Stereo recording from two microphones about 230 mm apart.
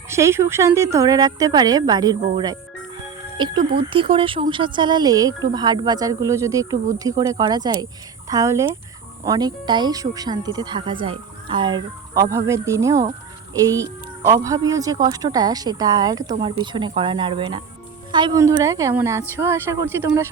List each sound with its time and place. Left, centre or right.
0.1 s speech: centre